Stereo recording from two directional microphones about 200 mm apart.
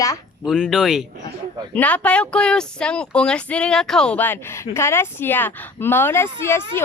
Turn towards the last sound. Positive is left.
turn(degrees=10)  # may be behind; listen again after turning